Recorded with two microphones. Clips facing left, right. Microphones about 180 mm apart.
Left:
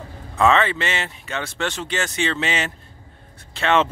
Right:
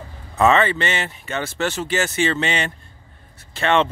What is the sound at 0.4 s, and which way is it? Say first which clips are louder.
Speech: right 1 dB; centre (ahead or behind).